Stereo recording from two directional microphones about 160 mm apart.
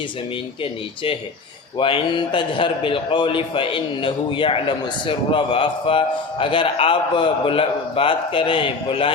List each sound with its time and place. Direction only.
1.8 s a man's voice: 30° left (ahead or behind)